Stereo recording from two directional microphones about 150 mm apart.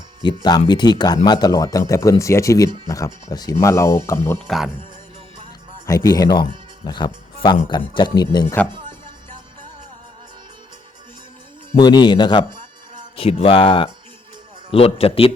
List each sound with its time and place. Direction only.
0.2 s speech: 30° left (ahead or behind)
4.4 s speech: centre (ahead or behind)
5.8 s speech: 20° left (ahead or behind)
11.8 s speech: 30° left (ahead or behind)